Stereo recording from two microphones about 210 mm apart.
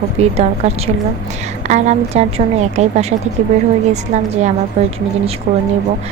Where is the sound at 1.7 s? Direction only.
35° right (ahead or behind).